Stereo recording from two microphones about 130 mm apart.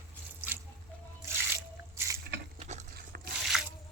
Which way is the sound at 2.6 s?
65° right (ahead or behind).